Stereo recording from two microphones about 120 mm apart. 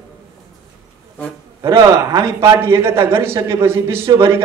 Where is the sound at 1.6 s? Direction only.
25° right (ahead or behind).